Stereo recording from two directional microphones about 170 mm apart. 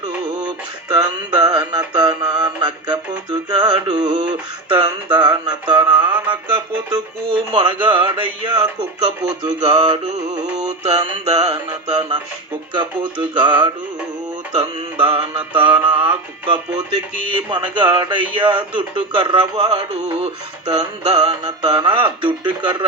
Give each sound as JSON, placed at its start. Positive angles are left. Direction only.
{"t": 0.4, "sound": "music", "side_deg": -25}
{"t": 7.3, "sound": "music", "side_deg": -30}
{"t": 14.5, "sound": "music", "side_deg": -30}